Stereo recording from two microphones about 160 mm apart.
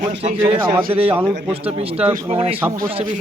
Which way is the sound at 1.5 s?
40° right (ahead or behind).